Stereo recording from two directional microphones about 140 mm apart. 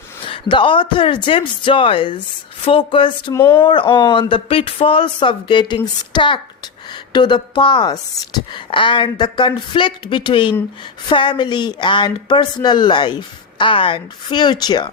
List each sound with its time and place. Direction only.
0.3 s a woman's voice: 40° left (ahead or behind)
3.3 s speech: 15° left (ahead or behind)
3.6 s a woman's voice: 35° left (ahead or behind)